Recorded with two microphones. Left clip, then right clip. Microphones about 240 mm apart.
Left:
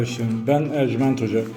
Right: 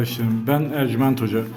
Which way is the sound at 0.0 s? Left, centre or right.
Right.